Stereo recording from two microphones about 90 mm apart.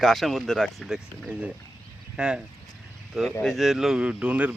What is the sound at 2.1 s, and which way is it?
Speech, 10° right (ahead or behind).